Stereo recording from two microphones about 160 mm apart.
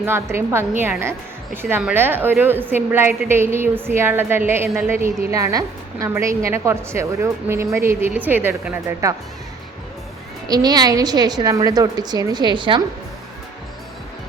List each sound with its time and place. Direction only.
0.0 s a woman's voice: 15° right (ahead or behind)
10.5 s a woman's voice: 25° right (ahead or behind)